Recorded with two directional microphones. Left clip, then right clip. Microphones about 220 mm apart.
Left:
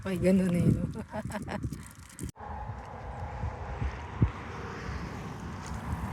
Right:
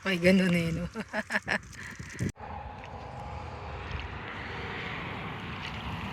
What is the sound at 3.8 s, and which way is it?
Boat, 25° right (ahead or behind).